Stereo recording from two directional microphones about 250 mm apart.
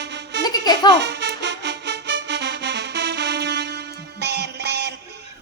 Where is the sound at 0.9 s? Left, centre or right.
Right.